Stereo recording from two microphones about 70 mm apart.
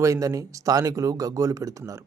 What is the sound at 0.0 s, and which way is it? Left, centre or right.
Speech, right.